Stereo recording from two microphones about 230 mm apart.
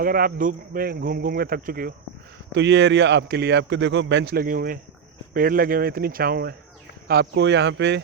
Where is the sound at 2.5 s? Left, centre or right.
Right.